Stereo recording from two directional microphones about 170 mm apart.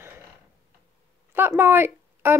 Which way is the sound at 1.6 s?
15° right (ahead or behind).